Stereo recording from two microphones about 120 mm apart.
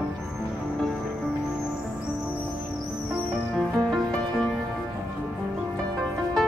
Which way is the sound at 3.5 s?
Centre (ahead or behind).